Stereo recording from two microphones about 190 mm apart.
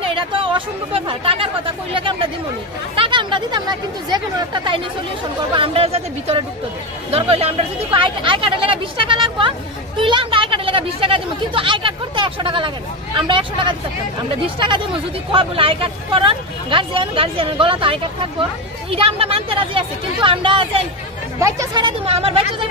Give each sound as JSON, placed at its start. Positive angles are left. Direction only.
{"t": 0.0, "sound": "speech", "side_deg": -25}
{"t": 15.3, "sound": "speech", "side_deg": -25}
{"t": 21.4, "sound": "speech", "side_deg": -15}